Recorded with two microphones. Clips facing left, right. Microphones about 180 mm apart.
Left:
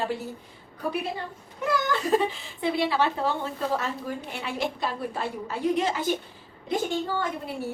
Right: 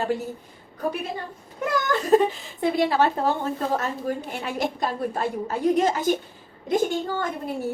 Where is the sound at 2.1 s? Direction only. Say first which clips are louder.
Right 7 dB; 45° right (ahead or behind).